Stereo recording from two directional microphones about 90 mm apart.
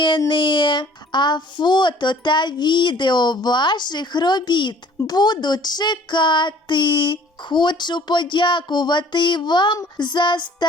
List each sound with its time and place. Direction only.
0.3 s speech: 60° left (ahead or behind)